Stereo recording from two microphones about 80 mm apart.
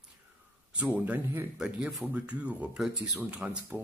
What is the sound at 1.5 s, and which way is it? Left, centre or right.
Speech, centre.